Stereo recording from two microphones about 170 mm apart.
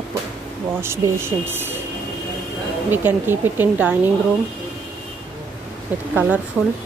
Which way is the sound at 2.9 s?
10° right (ahead or behind).